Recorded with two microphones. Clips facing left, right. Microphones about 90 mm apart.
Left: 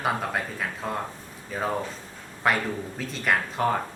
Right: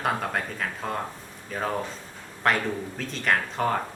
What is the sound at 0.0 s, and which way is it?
Speech, 5° left (ahead or behind).